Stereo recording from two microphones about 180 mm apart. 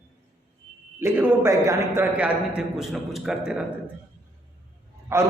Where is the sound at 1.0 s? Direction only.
15° right (ahead or behind).